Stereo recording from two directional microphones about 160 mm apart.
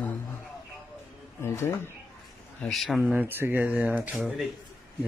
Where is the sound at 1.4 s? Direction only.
15° left (ahead or behind).